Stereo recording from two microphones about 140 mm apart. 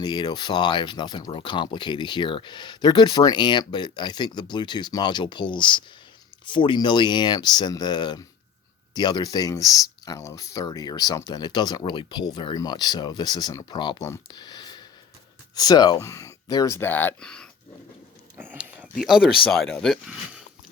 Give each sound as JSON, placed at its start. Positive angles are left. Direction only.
{"t": 0.0, "sound": "speech", "side_deg": 30}
{"t": 18.3, "sound": "a sound", "side_deg": -10}
{"t": 19.5, "sound": "speech", "side_deg": 5}